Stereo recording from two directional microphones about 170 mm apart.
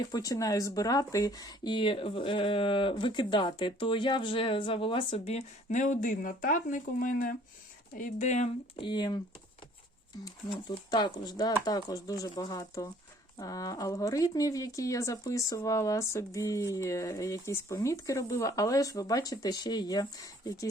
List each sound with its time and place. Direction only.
0.1 s speech: 20° left (ahead or behind); by 8.4 s 45° left (ahead or behind)
8.7 s speech: 25° left (ahead or behind)
10.5 s speech: 25° left (ahead or behind)